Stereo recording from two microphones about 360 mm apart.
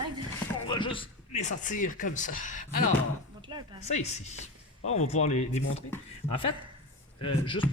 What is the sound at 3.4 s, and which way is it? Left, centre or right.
Speech, centre.